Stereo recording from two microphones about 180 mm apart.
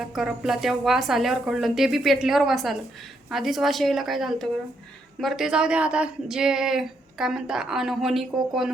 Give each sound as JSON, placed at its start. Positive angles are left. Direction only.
{"t": 0.1, "sound": "speech", "side_deg": 0}